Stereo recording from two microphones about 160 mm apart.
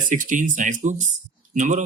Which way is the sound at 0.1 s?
55° right (ahead or behind).